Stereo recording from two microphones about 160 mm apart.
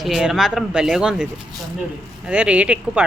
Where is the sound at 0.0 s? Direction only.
5° right (ahead or behind).